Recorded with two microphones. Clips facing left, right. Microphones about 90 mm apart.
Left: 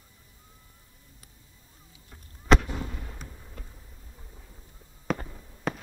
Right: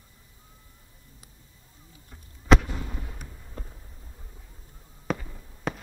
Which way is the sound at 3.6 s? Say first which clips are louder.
Right 8 dB; 35° right (ahead or behind).